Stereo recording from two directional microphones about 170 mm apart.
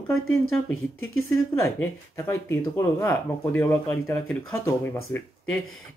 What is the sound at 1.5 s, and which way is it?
Speech, 15° left (ahead or behind).